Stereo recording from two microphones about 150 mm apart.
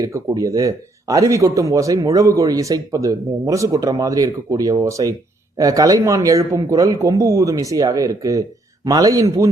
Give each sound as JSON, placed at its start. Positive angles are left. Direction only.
{"t": 0.0, "sound": "speech", "side_deg": -20}